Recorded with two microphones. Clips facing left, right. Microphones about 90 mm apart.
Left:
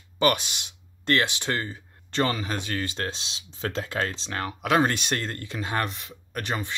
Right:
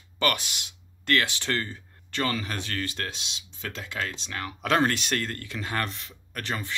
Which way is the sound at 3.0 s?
35° left (ahead or behind).